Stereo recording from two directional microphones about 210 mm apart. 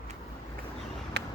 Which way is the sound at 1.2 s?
50° right (ahead or behind).